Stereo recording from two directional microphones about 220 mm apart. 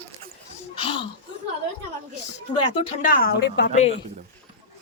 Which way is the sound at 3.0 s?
40° left (ahead or behind).